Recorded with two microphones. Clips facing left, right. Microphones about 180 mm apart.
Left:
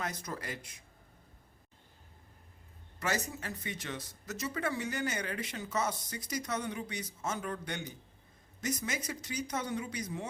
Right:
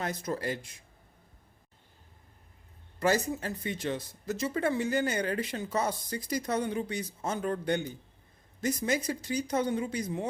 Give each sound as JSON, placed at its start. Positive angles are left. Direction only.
{"t": 0.0, "sound": "speech", "side_deg": -30}
{"t": 3.0, "sound": "speech", "side_deg": -30}